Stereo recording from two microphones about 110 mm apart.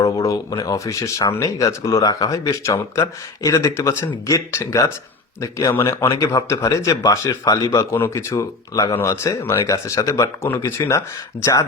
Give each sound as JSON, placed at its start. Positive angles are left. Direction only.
{"t": 0.0, "sound": "speech", "side_deg": 30}